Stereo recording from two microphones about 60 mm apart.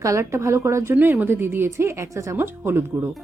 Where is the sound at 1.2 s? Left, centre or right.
Right.